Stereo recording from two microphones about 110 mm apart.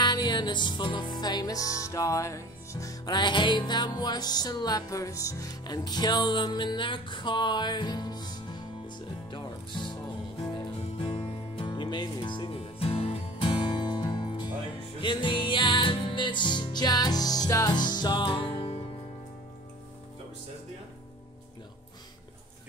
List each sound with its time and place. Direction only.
0.0 s music: 40° left (ahead or behind)